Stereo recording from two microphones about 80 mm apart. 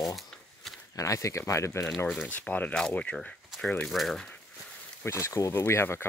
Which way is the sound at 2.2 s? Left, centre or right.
Centre.